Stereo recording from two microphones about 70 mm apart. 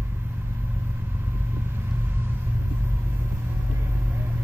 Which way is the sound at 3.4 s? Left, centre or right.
Right.